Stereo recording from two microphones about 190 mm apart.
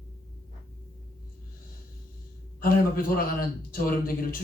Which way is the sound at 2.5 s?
50° left (ahead or behind).